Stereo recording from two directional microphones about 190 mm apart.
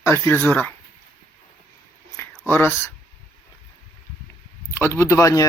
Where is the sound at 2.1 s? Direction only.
10° left (ahead or behind).